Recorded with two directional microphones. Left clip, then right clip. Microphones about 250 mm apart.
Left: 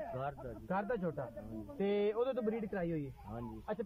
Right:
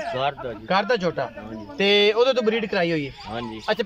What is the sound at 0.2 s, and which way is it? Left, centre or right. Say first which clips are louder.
A man's voice: right 17 dB; centre.